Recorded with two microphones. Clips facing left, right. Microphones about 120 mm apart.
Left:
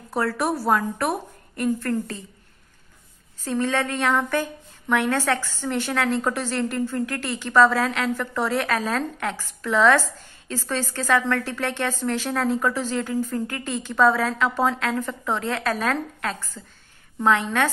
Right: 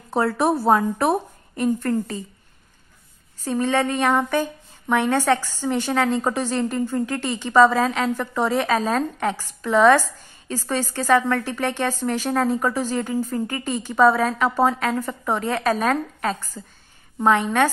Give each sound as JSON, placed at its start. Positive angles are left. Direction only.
{"t": 0.1, "sound": "a woman's voice", "side_deg": -25}
{"t": 3.4, "sound": "a woman's voice", "side_deg": -15}